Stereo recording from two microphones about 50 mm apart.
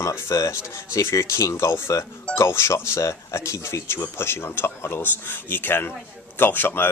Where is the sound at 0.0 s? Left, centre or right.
Left.